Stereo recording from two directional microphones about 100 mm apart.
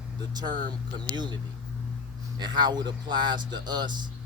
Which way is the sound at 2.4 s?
50° right (ahead or behind).